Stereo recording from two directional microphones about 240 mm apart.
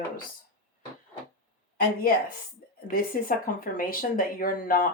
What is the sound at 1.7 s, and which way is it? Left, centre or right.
Speech, left.